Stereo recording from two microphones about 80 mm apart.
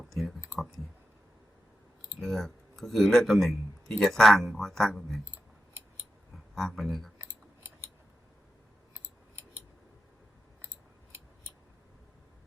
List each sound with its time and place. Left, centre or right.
0.1 s speech: centre
2.2 s speech: centre
6.3 s speech: centre
9.0 s a sound: right